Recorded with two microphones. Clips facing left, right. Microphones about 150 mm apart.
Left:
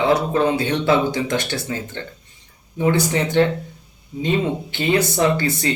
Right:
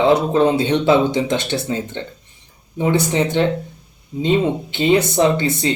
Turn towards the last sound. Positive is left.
turn(degrees=-20)  # may be behind; listen again after turning